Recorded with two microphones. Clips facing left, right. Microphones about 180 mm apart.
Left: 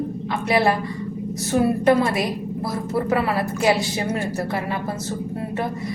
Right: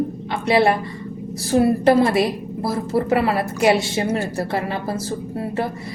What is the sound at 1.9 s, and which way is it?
A woman's voice, 30° right (ahead or behind).